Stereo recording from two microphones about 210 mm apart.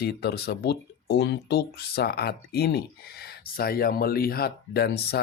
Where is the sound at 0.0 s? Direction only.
50° left (ahead or behind).